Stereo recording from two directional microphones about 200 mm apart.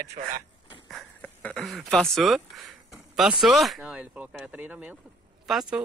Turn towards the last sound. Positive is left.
turn(degrees=0)  # may be behind; listen again after turning